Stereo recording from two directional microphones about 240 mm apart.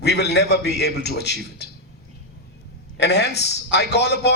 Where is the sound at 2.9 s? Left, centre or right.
Left.